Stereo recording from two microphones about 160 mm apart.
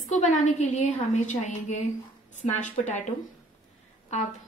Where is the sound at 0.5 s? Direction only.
45° left (ahead or behind).